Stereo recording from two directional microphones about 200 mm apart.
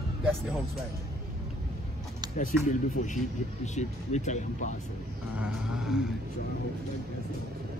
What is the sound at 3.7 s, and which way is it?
Speech, 35° left (ahead or behind).